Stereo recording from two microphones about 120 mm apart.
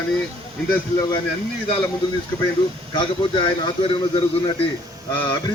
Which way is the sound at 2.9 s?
40° left (ahead or behind).